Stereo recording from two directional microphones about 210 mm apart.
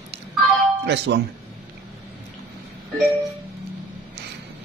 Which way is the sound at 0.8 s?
55° right (ahead or behind).